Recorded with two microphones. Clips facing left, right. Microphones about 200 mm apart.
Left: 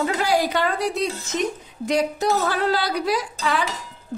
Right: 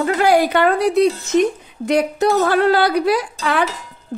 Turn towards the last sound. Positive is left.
turn(degrees=-60)  # may be behind; listen again after turning